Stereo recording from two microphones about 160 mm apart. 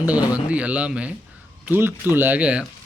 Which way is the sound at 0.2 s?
20° left (ahead or behind).